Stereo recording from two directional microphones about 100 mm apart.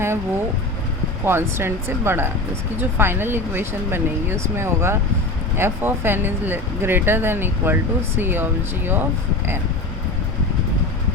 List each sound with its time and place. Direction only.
0.0 s speech: 25° right (ahead or behind)